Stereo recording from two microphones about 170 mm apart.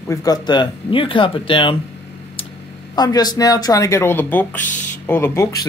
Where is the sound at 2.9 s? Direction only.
25° left (ahead or behind).